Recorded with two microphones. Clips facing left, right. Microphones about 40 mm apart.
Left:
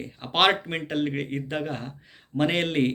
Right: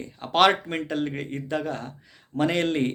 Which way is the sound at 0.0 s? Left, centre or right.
Left.